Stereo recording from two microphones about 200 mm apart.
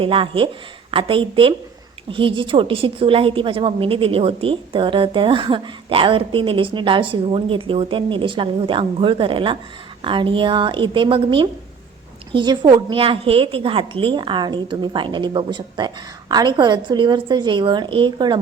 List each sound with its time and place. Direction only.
0.0 s a woman's voice: 25° right (ahead or behind)